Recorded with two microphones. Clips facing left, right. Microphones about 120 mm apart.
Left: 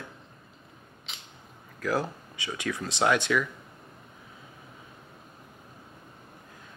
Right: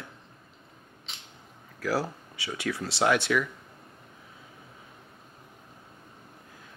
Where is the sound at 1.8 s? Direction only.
20° left (ahead or behind).